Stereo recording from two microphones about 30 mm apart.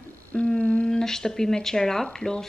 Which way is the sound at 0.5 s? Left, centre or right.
Left.